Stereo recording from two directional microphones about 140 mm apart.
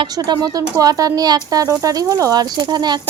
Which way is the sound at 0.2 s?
25° right (ahead or behind).